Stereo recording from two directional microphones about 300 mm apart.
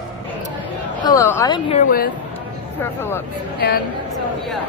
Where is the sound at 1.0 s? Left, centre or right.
Centre.